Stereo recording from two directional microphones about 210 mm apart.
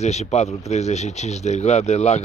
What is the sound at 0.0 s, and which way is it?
Speech, 30° left (ahead or behind).